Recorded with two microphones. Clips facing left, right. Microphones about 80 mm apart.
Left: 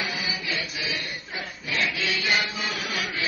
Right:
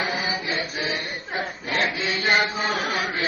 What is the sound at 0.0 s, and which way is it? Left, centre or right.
Chant, right.